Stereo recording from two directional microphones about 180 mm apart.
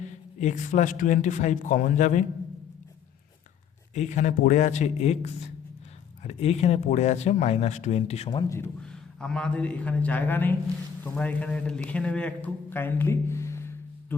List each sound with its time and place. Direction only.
0.0 s speech: 40° left (ahead or behind)
3.9 s speech: 40° left (ahead or behind); by 8.5 s 25° left (ahead or behind)
8.8 s a man's voice: 5° left (ahead or behind)